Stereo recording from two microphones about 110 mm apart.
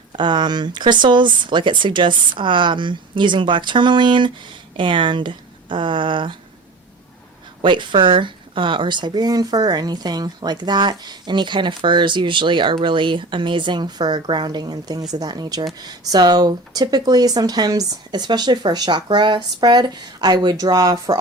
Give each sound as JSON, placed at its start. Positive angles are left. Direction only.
{"t": 0.1, "sound": "speech", "side_deg": -45}
{"t": 7.6, "sound": "speech", "side_deg": -45}